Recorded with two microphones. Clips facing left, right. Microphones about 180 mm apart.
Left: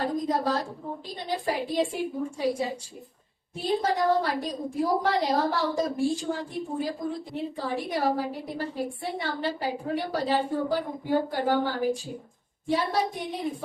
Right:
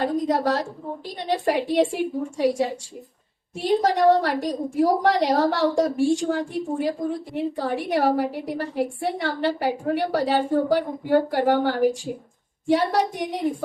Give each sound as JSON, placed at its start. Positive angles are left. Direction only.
{"t": 0.0, "sound": "a woman's voice", "side_deg": -70}